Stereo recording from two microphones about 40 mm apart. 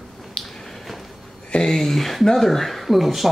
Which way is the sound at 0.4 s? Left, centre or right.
Left.